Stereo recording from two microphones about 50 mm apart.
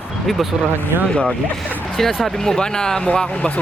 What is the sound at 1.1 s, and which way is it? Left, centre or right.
Speech, left.